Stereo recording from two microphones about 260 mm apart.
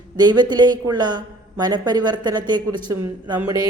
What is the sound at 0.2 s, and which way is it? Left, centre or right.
A man's voice, centre.